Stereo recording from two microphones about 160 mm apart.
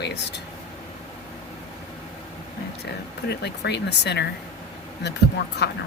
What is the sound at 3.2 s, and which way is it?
Speech, 90° left.